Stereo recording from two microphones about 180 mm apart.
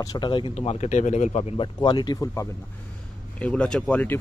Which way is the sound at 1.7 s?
25° left (ahead or behind).